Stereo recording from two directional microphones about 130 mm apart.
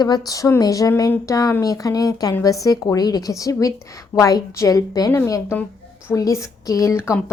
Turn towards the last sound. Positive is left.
turn(degrees=20)  # may be behind; listen again after turning